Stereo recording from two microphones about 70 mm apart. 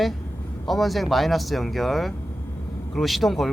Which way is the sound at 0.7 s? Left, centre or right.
Centre.